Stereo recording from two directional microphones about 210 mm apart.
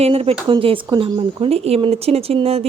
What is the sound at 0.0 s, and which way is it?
A woman's voice, 30° right (ahead or behind).